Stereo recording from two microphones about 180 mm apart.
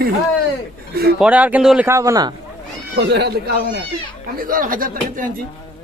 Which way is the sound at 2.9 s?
65° right (ahead or behind).